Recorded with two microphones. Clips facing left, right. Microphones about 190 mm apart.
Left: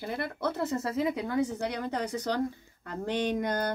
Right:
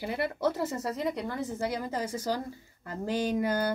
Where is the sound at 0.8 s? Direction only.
Centre (ahead or behind).